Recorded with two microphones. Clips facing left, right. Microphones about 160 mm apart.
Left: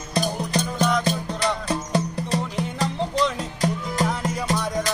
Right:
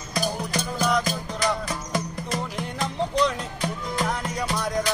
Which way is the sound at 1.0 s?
30° left (ahead or behind).